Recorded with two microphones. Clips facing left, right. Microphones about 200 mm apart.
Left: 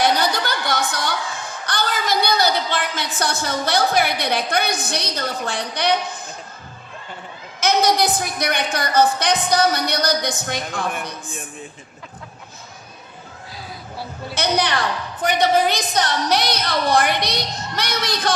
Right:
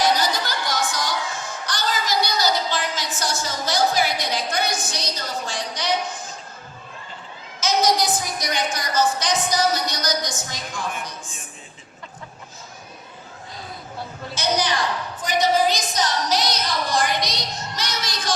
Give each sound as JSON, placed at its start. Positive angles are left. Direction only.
{"t": 0.0, "sound": "a sound", "side_deg": 60}
{"t": 7.6, "sound": "a woman's voice", "side_deg": 60}
{"t": 14.3, "sound": "a woman's voice", "side_deg": 60}